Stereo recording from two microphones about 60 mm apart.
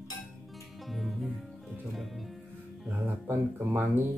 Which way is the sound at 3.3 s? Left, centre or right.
Right.